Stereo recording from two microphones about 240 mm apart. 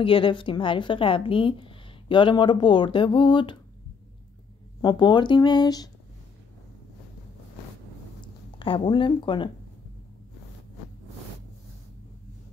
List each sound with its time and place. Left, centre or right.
0.0 s a woman's voice: left
4.8 s a woman's voice: centre
8.5 s a woman's voice: left